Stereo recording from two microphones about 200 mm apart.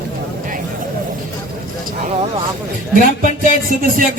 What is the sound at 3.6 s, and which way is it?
Speech, 45° right (ahead or behind).